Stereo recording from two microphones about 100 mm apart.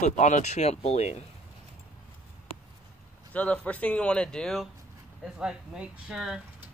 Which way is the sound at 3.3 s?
15° left (ahead or behind).